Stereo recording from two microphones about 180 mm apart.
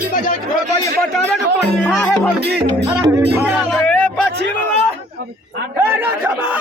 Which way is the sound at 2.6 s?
15° right (ahead or behind).